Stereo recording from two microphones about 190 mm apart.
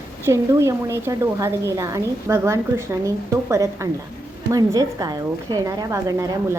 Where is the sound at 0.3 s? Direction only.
15° right (ahead or behind).